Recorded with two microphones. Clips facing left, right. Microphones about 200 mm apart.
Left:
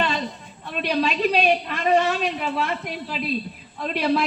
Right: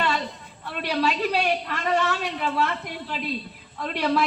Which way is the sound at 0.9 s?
20° left (ahead or behind).